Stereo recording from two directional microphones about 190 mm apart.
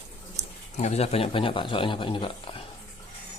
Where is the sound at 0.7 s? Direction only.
35° left (ahead or behind).